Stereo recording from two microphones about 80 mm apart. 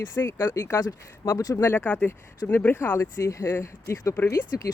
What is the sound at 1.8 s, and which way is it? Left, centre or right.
Speech, centre.